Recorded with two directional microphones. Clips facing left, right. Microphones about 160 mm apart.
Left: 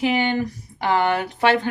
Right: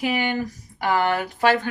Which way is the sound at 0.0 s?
25° left (ahead or behind).